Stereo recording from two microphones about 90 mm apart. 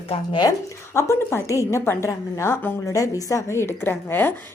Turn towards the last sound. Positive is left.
turn(degrees=25)  # may be behind; listen again after turning